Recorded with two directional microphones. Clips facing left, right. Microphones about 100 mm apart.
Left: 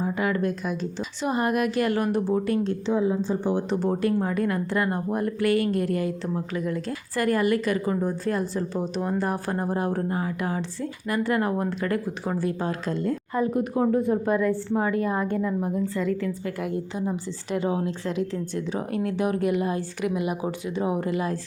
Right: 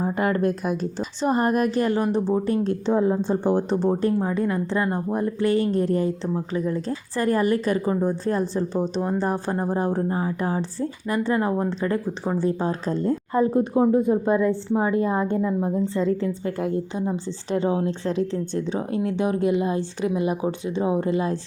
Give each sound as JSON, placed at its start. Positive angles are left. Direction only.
{"t": 0.0, "sound": "a woman's voice", "side_deg": -40}
{"t": 2.6, "sound": "a woman's voice", "side_deg": -45}
{"t": 3.7, "sound": "speech", "side_deg": -30}